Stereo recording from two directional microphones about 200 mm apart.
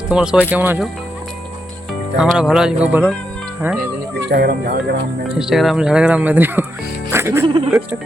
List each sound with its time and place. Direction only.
0.1 s speech: 5° right (ahead or behind)
2.1 s speech: centre (ahead or behind)
4.3 s speech: 50° right (ahead or behind)
5.4 s speech: centre (ahead or behind)
7.1 s music: 10° right (ahead or behind)
7.4 s speech: 30° right (ahead or behind)